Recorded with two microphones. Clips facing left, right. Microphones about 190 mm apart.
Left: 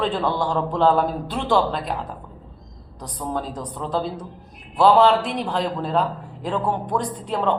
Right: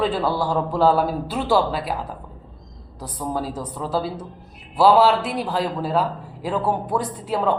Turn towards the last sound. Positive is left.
turn(degrees=-5)  # may be behind; listen again after turning